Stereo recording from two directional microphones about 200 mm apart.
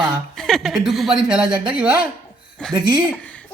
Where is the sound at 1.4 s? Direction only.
25° right (ahead or behind).